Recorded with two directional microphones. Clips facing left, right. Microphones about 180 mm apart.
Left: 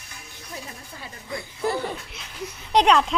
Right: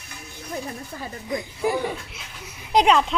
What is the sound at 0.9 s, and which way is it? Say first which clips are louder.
Speech: right 5 dB; 45° right (ahead or behind).